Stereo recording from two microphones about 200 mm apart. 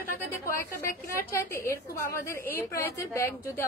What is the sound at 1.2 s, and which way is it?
A woman's voice, 15° left (ahead or behind).